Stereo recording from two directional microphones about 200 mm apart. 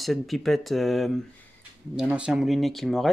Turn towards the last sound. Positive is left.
turn(degrees=0)  # may be behind; listen again after turning